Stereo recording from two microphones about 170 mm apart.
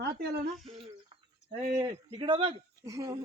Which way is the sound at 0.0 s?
70° right (ahead or behind).